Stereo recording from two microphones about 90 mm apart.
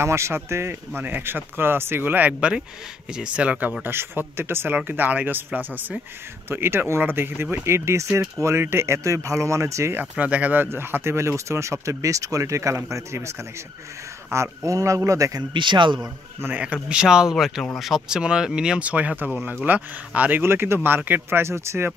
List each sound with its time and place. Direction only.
0.0 s speech: 30° right (ahead or behind)
9.9 s speech: 15° right (ahead or behind); by 13.3 s 30° right (ahead or behind)
14.3 s speech: 30° right (ahead or behind)
15.5 s a man's voice: 60° right (ahead or behind)
16.4 s speech: 15° right (ahead or behind)